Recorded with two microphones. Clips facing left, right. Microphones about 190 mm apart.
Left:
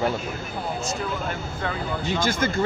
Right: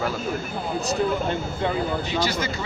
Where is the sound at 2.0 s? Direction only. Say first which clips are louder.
Left 1 dB; 50° left (ahead or behind).